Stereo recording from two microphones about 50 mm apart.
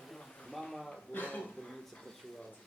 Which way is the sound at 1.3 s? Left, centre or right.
Left.